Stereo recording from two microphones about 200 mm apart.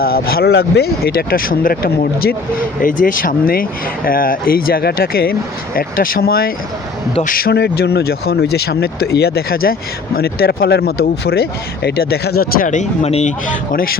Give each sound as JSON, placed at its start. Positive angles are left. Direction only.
{"t": 0.0, "sound": "speech", "side_deg": 50}